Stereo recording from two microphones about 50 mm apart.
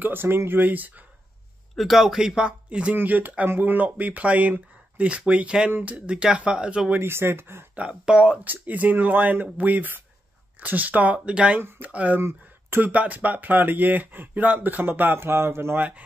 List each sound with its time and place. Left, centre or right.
0.0 s speech: right
1.8 s speech: centre
2.9 s speech: right
5.7 s speech: right
6.0 s speech: right
7.0 s speech: right
7.7 s speech: right
8.5 s speech: right
12.2 s speech: right
12.9 s speech: right
15.1 s a man's voice: right